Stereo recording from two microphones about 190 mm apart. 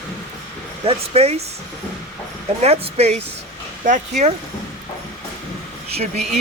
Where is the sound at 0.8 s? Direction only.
35° right (ahead or behind).